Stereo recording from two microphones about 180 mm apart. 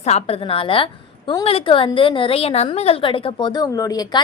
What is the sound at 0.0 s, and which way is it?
A woman's voice, 35° left (ahead or behind).